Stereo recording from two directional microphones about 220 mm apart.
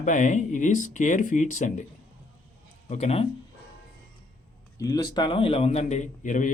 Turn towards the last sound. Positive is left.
turn(degrees=35)  # may be behind; listen again after turning